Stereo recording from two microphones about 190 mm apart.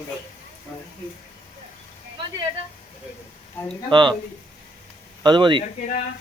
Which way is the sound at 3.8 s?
25° right (ahead or behind).